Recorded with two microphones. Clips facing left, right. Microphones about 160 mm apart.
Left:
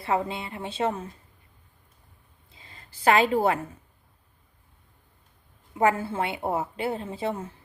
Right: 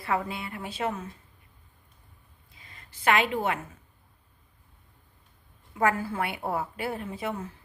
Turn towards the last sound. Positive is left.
turn(degrees=30)  # may be behind; listen again after turning